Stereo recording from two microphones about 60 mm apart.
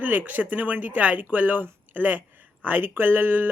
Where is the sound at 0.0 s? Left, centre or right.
Right.